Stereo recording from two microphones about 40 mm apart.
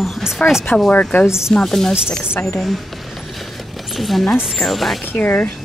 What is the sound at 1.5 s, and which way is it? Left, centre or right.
Speech, centre.